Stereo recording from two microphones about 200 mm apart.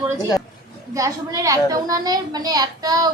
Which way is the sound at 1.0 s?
15° right (ahead or behind).